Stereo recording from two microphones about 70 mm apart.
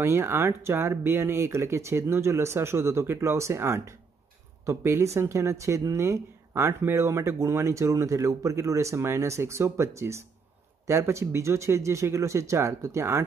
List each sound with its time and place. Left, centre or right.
0.0 s speech: right